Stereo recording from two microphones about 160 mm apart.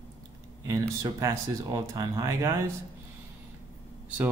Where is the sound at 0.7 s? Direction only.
20° right (ahead or behind).